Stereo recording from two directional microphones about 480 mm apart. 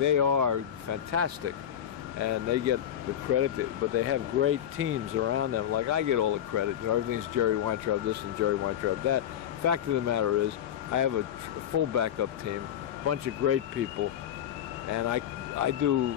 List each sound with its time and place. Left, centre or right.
0.0 s speech: right
14.9 s speech: right